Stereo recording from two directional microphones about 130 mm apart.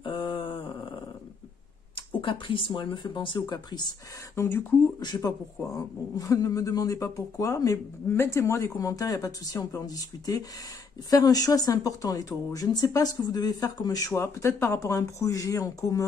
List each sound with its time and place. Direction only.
0.0 s a sound: 40° left (ahead or behind)
2.0 s speech: 40° left (ahead or behind)
4.4 s speech: 15° left (ahead or behind)
5.0 s speech: 30° left (ahead or behind)